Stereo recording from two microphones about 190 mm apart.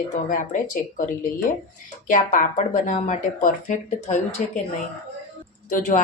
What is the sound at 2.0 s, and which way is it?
A woman's voice, 45° left (ahead or behind).